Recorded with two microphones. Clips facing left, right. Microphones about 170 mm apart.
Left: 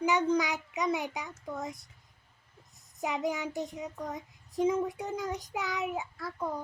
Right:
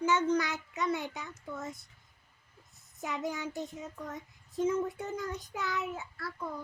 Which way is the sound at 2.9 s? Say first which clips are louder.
Left 4 dB; 20° left (ahead or behind).